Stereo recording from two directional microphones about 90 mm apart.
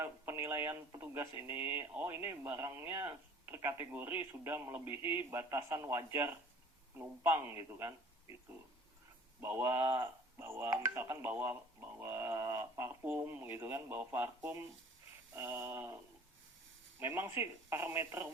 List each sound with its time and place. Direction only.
0.0 s a man's voice: 25° right (ahead or behind)
9.4 s a man's voice: 25° right (ahead or behind)
17.2 s a man's voice: 25° right (ahead or behind)